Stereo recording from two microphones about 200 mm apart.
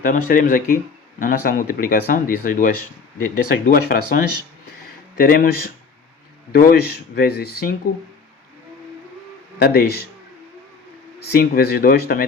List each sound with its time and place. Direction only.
0.0 s speech: 40° left (ahead or behind)
9.6 s speech: 50° left (ahead or behind)
11.2 s speech: 50° left (ahead or behind)